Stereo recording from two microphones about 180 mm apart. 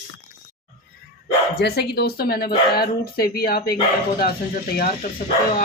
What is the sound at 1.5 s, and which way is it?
Speech, 65° left (ahead or behind).